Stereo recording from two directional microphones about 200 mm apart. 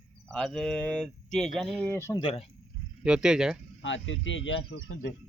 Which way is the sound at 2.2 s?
30° left (ahead or behind).